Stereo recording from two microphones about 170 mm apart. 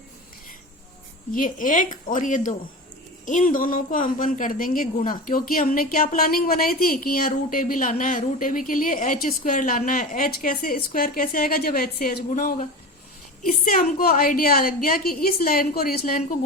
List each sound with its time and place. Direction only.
1.3 s a woman's voice: 50° left (ahead or behind)